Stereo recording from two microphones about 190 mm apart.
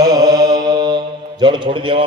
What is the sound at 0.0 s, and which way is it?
A man's voice, 20° right (ahead or behind).